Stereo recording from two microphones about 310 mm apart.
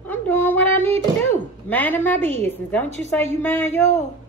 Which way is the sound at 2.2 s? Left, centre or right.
Right.